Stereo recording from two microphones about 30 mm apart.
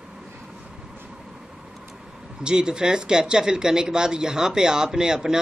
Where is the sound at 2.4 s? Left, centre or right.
Right.